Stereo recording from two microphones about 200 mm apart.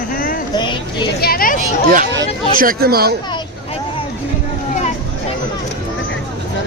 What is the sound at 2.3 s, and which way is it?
Speech, 25° left (ahead or behind).